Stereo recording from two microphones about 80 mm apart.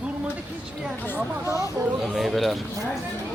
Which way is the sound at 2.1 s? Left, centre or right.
Centre.